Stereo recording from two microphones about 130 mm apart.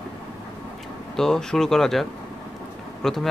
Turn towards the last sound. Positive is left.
turn(degrees=0)  # may be behind; listen again after turning